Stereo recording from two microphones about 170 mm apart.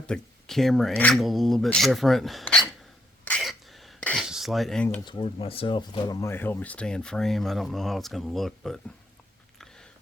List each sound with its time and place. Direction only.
0.1 s speech: centre (ahead or behind)
3.2 s cutlery: 5° left (ahead or behind)
5.2 s speech: 35° left (ahead or behind); by 8.8 s centre (ahead or behind)
9.6 s a sound: 5° left (ahead or behind)